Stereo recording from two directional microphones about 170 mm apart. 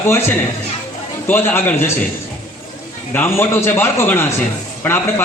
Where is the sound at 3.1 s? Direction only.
15° left (ahead or behind).